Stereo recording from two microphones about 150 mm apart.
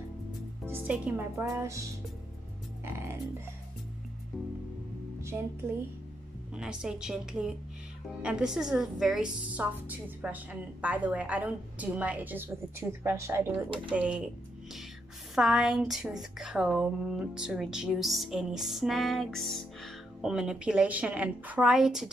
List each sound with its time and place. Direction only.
0.7 s a woman's voice: 10° right (ahead or behind)
2.8 s music: 15° right (ahead or behind)
5.2 s speech: 15° right (ahead or behind)
6.5 s a woman's voice: 5° right (ahead or behind)
15.3 s speech: centre (ahead or behind)